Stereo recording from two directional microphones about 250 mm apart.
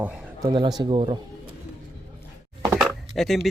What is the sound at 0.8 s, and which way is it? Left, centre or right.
Speech, centre.